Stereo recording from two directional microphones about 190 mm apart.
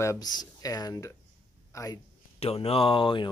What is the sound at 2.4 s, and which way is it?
Speech, 30° left (ahead or behind).